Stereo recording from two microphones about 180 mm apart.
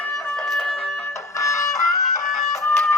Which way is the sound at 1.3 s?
15° left (ahead or behind).